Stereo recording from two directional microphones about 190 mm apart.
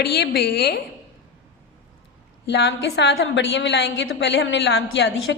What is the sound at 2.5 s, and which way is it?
A woman's voice, 65° left (ahead or behind).